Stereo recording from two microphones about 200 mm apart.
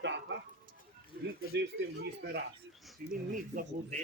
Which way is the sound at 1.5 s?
55° right (ahead or behind).